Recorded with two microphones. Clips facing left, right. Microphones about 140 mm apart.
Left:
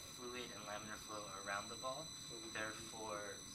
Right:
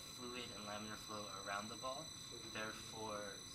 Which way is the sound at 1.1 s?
15° right (ahead or behind).